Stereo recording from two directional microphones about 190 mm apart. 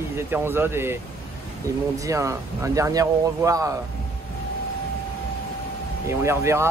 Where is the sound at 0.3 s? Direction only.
10° right (ahead or behind).